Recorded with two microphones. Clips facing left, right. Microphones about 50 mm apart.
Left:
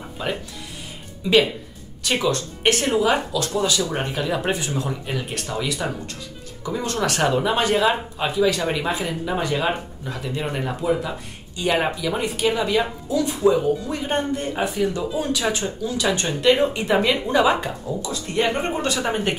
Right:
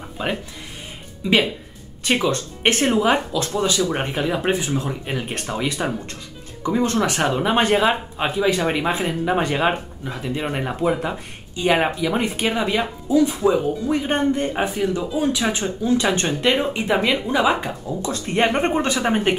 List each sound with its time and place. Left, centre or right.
0.2 s speech: right
7.0 s speech: centre
7.4 s speech: right
10.8 s speech: right
14.8 s speech: centre
15.8 s speech: right
16.3 s speech: centre
18.0 s speech: right
18.8 s speech: right